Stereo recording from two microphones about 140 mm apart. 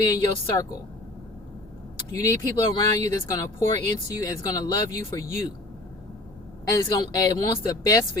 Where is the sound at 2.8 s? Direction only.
25° left (ahead or behind).